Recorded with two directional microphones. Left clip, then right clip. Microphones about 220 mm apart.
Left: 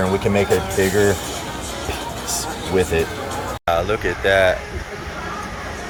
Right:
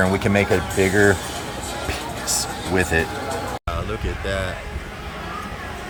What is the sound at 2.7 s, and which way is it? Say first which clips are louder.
Speech: left 2 dB; 15° right (ahead or behind).